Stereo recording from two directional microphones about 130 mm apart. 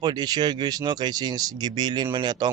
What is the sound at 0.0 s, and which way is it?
Speech, 35° right (ahead or behind).